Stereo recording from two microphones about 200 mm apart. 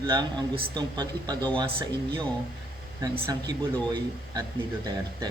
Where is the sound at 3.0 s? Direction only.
20° right (ahead or behind).